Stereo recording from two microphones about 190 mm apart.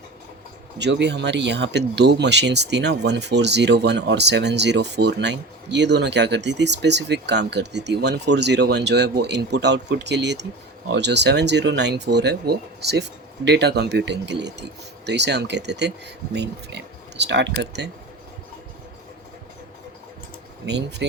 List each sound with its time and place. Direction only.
0.8 s speech: 65° right (ahead or behind)
20.7 s speech: 65° right (ahead or behind)